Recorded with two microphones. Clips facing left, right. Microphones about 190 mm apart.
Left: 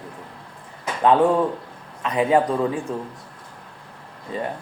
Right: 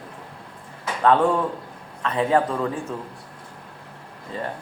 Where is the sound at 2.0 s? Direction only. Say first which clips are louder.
Left 2 dB; 15° left (ahead or behind).